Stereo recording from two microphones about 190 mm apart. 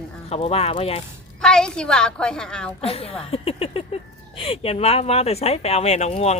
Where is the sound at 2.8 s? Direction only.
30° left (ahead or behind).